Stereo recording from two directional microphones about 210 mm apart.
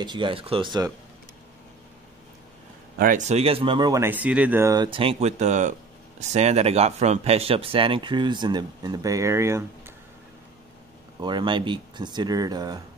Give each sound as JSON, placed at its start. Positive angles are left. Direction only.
{"t": 0.0, "sound": "speech", "side_deg": -20}
{"t": 3.0, "sound": "speech", "side_deg": -40}
{"t": 11.1, "sound": "speech", "side_deg": -20}